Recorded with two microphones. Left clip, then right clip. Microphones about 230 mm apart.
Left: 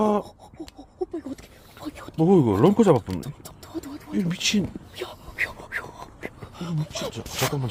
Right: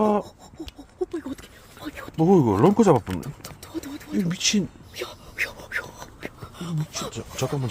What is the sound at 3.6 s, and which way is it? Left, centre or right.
Wild animals, right.